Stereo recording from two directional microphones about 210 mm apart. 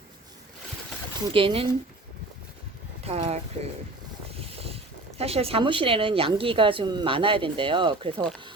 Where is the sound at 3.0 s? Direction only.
30° right (ahead or behind).